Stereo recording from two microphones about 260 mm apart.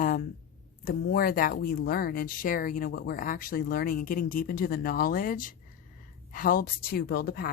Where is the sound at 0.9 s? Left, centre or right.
Left.